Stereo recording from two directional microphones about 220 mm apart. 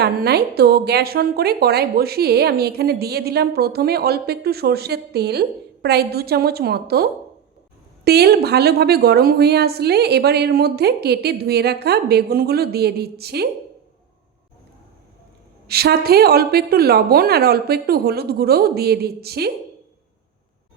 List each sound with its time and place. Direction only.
0.0 s a woman's voice: 45° right (ahead or behind)
15.6 s a woman's voice: 45° right (ahead or behind)